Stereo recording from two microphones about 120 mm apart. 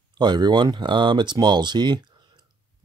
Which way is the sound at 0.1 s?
35° right (ahead or behind).